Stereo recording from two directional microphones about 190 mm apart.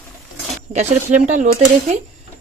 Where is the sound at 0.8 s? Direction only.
40° right (ahead or behind).